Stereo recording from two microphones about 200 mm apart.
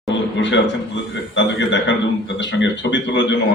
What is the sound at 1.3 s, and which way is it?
A man's voice, 65° left (ahead or behind).